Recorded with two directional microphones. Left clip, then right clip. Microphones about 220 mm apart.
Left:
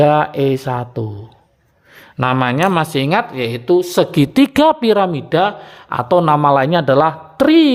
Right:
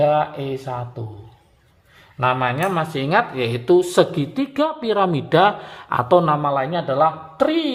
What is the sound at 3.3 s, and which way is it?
Speech, 15° left (ahead or behind).